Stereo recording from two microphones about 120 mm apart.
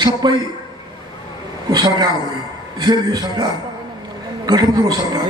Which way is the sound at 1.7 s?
35° right (ahead or behind).